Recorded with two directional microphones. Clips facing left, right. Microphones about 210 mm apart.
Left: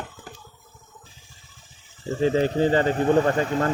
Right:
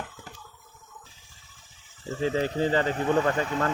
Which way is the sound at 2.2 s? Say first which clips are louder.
Left 5 dB; 30° left (ahead or behind).